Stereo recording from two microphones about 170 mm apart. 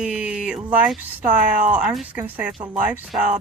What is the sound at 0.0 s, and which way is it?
Speech, 5° right (ahead or behind).